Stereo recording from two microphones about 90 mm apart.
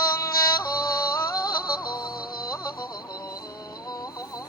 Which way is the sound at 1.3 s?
45° left (ahead or behind).